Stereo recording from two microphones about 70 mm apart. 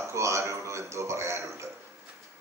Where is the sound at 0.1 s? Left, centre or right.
Right.